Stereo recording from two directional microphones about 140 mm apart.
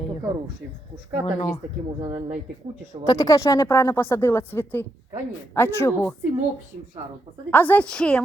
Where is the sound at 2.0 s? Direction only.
40° right (ahead or behind).